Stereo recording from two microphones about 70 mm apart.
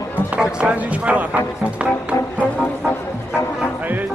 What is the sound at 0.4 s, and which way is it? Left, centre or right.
Speech, centre.